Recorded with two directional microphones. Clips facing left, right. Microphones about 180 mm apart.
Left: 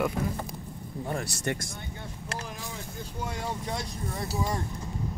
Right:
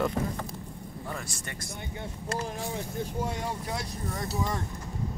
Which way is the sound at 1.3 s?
70° left (ahead or behind).